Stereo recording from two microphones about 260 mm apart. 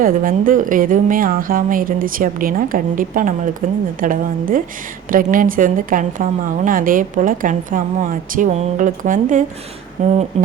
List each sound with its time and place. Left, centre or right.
0.0 s a woman's voice: right